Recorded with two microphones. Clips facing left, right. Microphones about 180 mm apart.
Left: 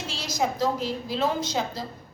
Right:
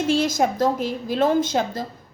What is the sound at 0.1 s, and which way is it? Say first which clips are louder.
A woman's voice: right 7 dB; 50° right (ahead or behind).